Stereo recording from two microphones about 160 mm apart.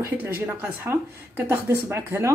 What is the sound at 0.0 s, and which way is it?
Speech, 10° right (ahead or behind).